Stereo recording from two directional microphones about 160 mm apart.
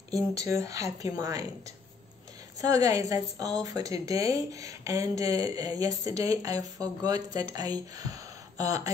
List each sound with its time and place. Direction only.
0.7 s a woman's voice: 20° right (ahead or behind)
2.6 s a woman's voice: 20° right (ahead or behind)